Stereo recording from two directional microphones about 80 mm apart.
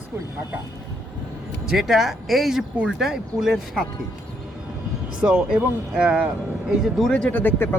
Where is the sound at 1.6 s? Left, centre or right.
Centre.